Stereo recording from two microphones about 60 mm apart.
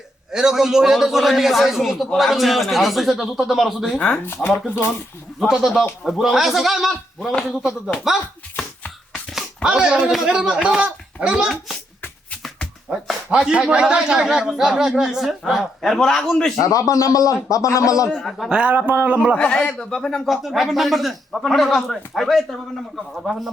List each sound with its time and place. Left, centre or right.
0.3 s speech: centre
3.8 s a man's voice: centre
4.4 s speech: centre
9.6 s speech: centre
12.9 s speech: centre
15.8 s speech: centre
16.6 s speech: left
18.1 s speech: centre
18.4 s a man's voice: centre
19.4 s a man's voice: centre
20.2 s speech: centre